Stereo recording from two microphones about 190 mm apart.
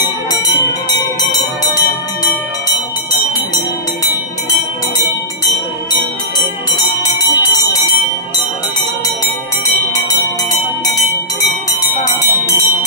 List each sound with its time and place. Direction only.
1.6 s music: 20° left (ahead or behind)
3.1 s jingle bell: 20° left (ahead or behind)
6.8 s jingle bell: 20° left (ahead or behind)
11.8 s jingle bell: 15° left (ahead or behind)